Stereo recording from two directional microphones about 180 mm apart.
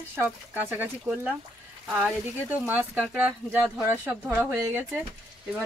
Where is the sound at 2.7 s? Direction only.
10° right (ahead or behind).